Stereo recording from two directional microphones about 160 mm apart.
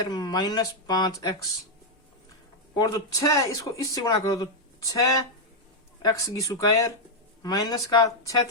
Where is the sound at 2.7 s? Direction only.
25° left (ahead or behind).